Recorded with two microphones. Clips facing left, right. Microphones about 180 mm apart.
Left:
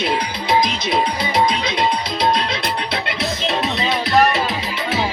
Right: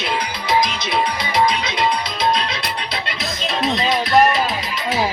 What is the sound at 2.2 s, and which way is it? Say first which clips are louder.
Music: left 1 dB; 55° left (ahead or behind).